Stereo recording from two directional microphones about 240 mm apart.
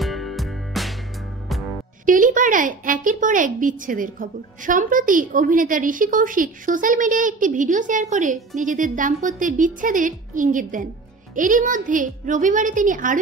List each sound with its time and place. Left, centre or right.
0.0 s music: centre
2.0 s a woman's voice: right